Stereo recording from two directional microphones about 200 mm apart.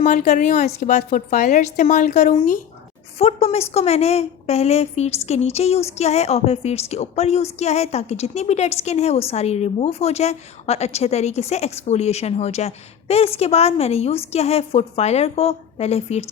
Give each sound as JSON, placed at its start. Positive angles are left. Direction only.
{"t": 0.0, "sound": "a woman's voice", "side_deg": 40}